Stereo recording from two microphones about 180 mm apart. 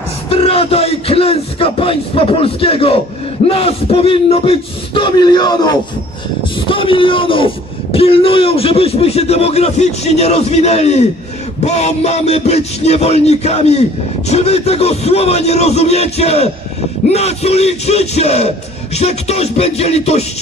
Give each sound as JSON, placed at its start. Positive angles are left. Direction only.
{"t": 0.3, "sound": "a man's voice", "side_deg": 30}